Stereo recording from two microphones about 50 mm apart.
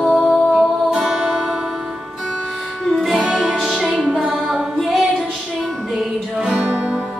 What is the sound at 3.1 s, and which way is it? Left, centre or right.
Music, right.